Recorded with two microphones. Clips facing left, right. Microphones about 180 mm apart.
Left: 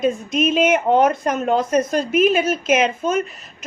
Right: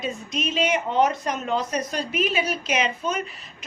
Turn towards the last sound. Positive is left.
turn(degrees=50)  # may be behind; listen again after turning